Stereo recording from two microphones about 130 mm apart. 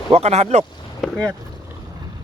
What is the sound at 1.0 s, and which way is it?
Boat, centre (ahead or behind).